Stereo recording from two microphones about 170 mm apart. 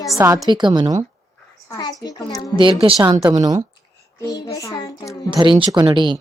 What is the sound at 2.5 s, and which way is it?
Speech, 30° right (ahead or behind).